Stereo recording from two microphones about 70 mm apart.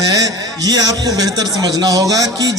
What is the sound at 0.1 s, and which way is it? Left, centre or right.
A man's voice, right.